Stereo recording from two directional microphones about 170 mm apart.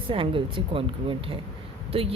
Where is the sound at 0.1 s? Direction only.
30° right (ahead or behind).